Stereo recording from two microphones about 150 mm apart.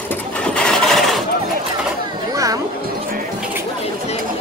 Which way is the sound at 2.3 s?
20° right (ahead or behind).